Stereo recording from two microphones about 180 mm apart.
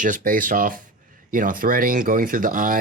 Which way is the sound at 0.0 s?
50° right (ahead or behind).